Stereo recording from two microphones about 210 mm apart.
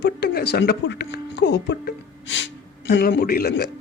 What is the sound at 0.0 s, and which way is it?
Speech, 50° left (ahead or behind).